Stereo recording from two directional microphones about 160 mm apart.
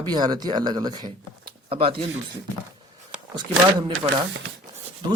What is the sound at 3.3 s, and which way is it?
Speech, 25° right (ahead or behind).